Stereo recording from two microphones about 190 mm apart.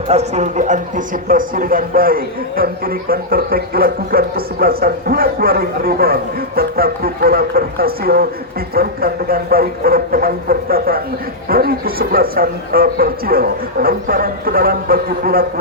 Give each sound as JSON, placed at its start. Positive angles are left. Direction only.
{"t": 0.1, "sound": "speech", "side_deg": -35}